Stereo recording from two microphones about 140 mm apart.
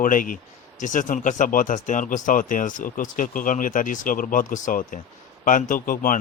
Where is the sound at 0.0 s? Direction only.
75° left (ahead or behind).